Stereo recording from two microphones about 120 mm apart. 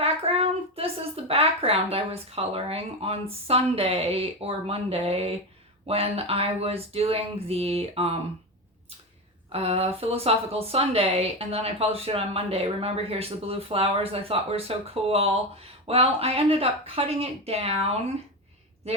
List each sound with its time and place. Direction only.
0.0 s a woman's voice: 55° right (ahead or behind)
9.5 s speech: 60° right (ahead or behind)